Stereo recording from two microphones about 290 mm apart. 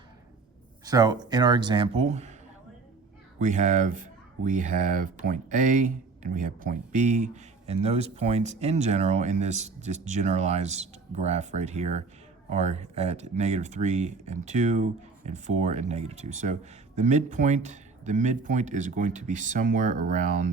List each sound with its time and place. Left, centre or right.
0.9 s speech: centre
3.3 s speech: right